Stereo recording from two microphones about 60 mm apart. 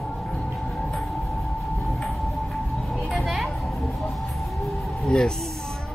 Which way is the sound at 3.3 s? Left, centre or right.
Centre.